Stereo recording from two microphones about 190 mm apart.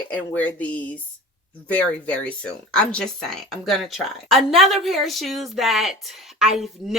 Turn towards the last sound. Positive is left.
turn(degrees=0)  # may be behind; listen again after turning